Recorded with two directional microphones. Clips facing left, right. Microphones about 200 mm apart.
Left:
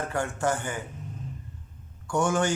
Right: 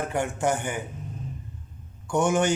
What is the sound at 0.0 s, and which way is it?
Speech, 20° right (ahead or behind).